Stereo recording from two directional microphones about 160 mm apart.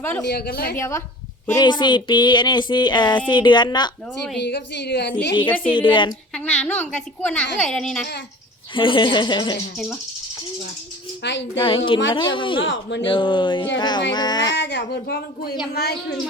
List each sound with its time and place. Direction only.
0.0 s a woman's voice: 10° left (ahead or behind)
0.3 s a woman's voice: 75° left (ahead or behind)
0.8 s a woman's voice: 15° left (ahead or behind)
4.4 s a woman's voice: 90° left
5.5 s a woman's voice: 10° left (ahead or behind)
5.7 s speech: 30° left (ahead or behind)
6.3 s a woman's voice: 10° left (ahead or behind)
8.7 s speech: 30° left (ahead or behind)
11.6 s speech: 35° left (ahead or behind)
14.5 s a woman's voice: 90° left